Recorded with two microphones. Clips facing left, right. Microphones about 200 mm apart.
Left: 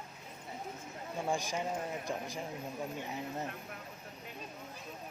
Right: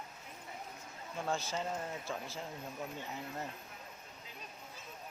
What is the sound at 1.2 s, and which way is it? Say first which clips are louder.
A man's voice: left 2 dB; 15° left (ahead or behind).